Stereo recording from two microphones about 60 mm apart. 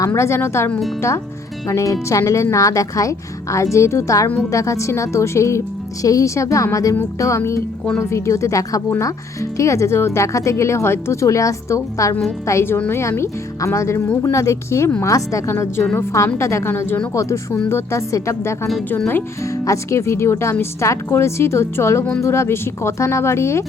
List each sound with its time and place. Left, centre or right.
0.2 s speech: left
1.6 s speech: left
16.6 s speech: left
17.2 s speech: left
17.7 s speech: left
18.1 s speech: left